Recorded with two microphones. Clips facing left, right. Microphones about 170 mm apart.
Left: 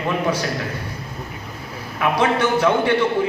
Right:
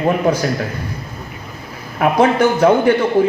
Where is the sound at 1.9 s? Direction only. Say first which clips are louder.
Right 6 dB; 40° right (ahead or behind).